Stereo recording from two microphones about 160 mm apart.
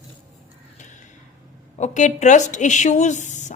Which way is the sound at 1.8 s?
50° left (ahead or behind).